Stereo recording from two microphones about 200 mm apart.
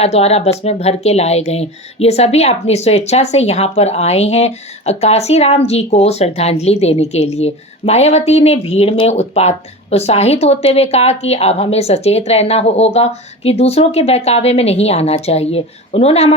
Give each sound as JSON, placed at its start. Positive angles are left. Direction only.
{"t": 0.0, "sound": "speech", "side_deg": 30}